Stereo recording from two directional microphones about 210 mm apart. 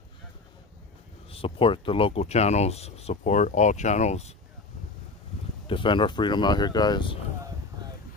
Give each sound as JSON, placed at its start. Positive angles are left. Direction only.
{"t": 1.3, "sound": "speech", "side_deg": 25}
{"t": 5.7, "sound": "speech", "side_deg": 25}